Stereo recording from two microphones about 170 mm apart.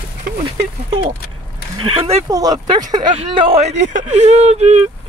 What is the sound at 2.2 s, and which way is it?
Speech, 20° right (ahead or behind).